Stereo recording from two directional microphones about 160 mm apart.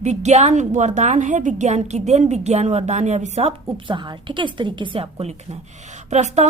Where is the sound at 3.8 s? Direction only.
30° right (ahead or behind).